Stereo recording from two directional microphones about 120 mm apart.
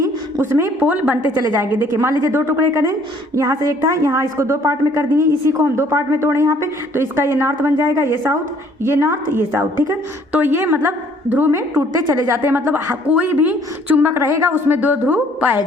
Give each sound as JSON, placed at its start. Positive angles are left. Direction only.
{"t": 0.0, "sound": "a woman's voice", "side_deg": -20}